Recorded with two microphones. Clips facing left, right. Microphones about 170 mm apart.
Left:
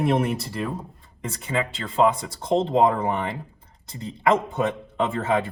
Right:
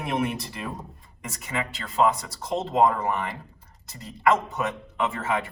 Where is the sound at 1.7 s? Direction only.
55° left (ahead or behind).